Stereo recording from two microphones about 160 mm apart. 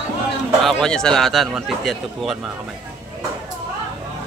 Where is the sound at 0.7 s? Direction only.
5° left (ahead or behind).